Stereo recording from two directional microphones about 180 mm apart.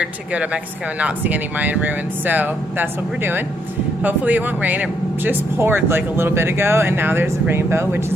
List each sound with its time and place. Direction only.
0.0 s speech: 5° right (ahead or behind)
4.0 s speech: 10° right (ahead or behind)